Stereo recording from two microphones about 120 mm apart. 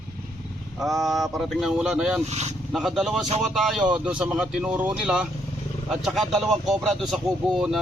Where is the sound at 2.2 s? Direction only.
65° right (ahead or behind).